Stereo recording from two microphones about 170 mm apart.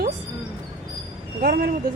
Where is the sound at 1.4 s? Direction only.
65° right (ahead or behind).